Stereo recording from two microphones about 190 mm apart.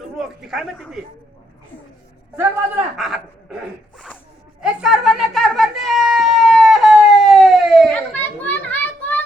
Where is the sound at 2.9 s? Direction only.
Centre (ahead or behind).